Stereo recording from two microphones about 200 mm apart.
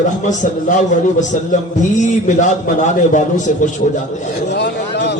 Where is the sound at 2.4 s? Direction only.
40° left (ahead or behind).